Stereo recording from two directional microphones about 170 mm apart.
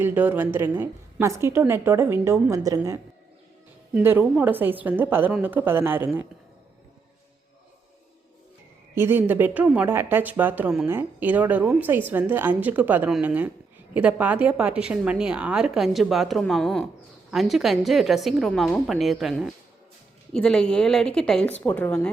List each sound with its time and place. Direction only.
0.0 s speech: 10° right (ahead or behind)
9.0 s a woman's voice: 10° right (ahead or behind); by 22.1 s 10° left (ahead or behind)